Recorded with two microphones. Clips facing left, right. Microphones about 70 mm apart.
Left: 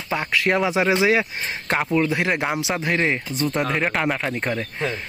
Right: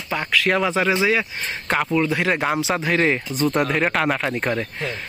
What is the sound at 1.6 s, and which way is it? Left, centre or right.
Speech, centre.